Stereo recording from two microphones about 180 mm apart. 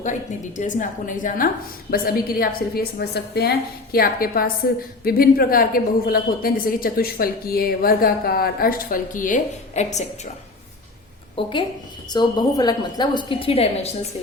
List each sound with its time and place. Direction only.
0.0 s a woman's voice: 45° left (ahead or behind)
11.3 s a woman's voice: 30° left (ahead or behind)